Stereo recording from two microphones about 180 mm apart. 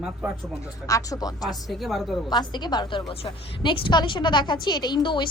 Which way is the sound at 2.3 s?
25° left (ahead or behind).